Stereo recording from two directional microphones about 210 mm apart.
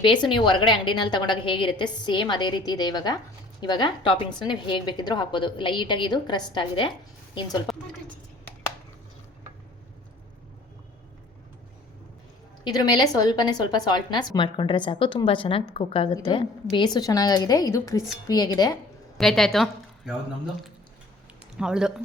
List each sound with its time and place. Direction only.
0.0 s a woman's voice: 20° left (ahead or behind)
7.7 s a sound: centre (ahead or behind)
12.6 s a woman's voice: 20° left (ahead or behind)
19.1 s a woman's voice: centre (ahead or behind)
21.6 s speech: 5° right (ahead or behind)